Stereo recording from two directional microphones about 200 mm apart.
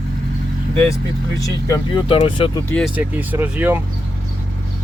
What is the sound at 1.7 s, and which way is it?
Speech, 25° left (ahead or behind).